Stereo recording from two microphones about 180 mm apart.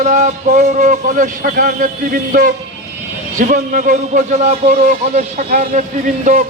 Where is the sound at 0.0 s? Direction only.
40° right (ahead or behind).